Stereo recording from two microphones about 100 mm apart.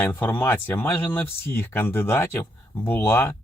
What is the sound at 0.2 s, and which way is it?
Speech, 20° left (ahead or behind).